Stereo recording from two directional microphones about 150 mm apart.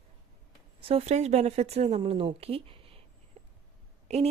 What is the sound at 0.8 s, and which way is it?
Speech, 45° right (ahead or behind).